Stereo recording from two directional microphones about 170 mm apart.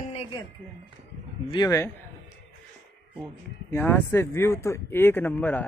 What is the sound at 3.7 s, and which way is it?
Speech, 10° left (ahead or behind).